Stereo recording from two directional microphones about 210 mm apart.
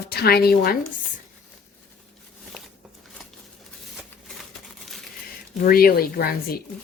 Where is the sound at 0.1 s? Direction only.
50° left (ahead or behind).